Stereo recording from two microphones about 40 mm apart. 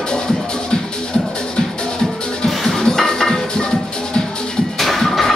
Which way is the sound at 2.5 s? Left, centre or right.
Centre.